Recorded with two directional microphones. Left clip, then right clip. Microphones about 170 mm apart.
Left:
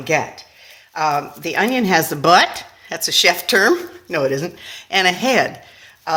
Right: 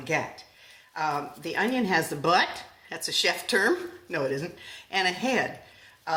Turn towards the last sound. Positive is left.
turn(degrees=50)  # may be behind; listen again after turning